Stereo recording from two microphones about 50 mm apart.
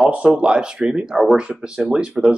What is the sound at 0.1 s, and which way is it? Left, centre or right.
Speech, right.